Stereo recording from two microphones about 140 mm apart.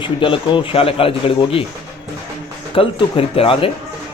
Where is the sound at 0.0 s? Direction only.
35° left (ahead or behind).